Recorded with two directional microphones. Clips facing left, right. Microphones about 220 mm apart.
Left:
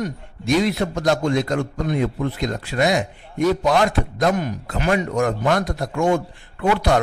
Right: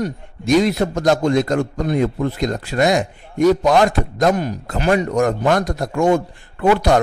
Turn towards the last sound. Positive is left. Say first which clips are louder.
# right 4 dB
turn(degrees=-40)  # may be behind; listen again after turning